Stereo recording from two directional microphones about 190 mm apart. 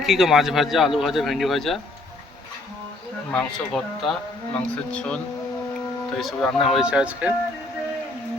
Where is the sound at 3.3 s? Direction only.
Centre (ahead or behind).